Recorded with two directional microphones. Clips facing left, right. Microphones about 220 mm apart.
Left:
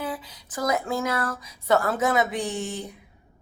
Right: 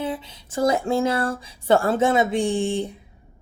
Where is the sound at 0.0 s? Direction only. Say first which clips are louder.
Right 4 dB; 25° right (ahead or behind).